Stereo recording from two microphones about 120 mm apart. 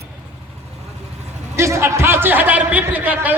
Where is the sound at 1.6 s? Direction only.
25° right (ahead or behind).